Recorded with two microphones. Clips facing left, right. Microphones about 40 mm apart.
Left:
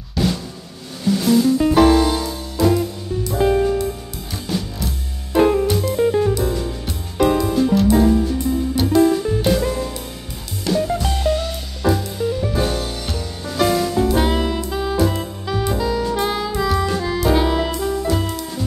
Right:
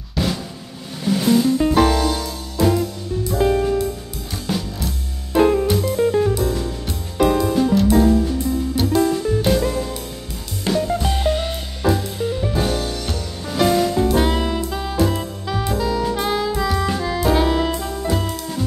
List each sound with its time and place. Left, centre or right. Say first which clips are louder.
0.2 s drum: left 2 dB; centre
1.0 s music: left 1 dB; centre
2.0 s music: left 3 dB; centre
2.6 s music: left 1 dB; centre
10.7 s music: even; right
11.0 s music: right 1 dB; centre
11.2 s music: left 2 dB; right
11.8 s music: left 1 dB; centre
12.5 s music: even; centre